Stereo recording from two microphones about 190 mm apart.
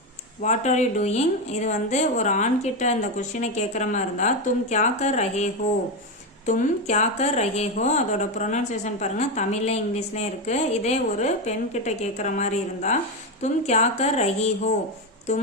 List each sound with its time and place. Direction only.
0.4 s speech: 40° left (ahead or behind)